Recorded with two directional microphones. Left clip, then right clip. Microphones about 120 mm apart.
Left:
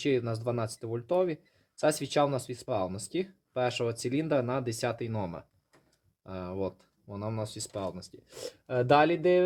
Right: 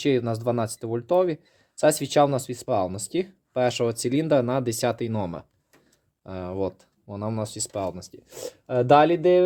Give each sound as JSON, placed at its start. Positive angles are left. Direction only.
{"t": 0.0, "sound": "speech", "side_deg": -40}